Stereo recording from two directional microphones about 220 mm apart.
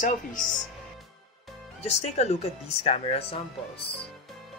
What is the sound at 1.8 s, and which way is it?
Speech, 30° left (ahead or behind).